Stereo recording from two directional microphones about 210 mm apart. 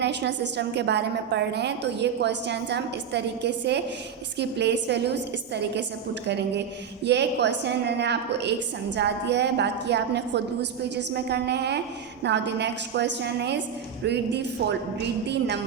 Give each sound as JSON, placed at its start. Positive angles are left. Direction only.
{"t": 0.0, "sound": "a woman's voice", "side_deg": -55}
{"t": 7.0, "sound": "a woman's voice", "side_deg": -55}